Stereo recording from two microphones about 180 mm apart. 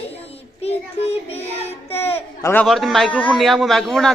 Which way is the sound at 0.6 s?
35° left (ahead or behind).